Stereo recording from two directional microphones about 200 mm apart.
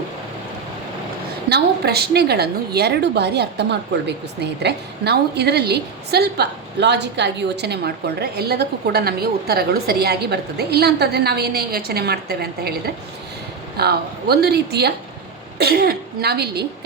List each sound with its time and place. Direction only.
1.5 s a woman's voice: 55° right (ahead or behind)